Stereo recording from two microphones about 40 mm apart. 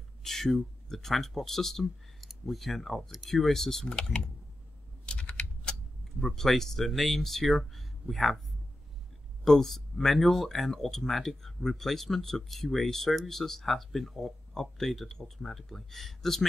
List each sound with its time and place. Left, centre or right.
0.2 s a sound: centre
0.8 s speech: centre
5.0 s typing: left
6.2 s speech: centre
9.4 s speech: centre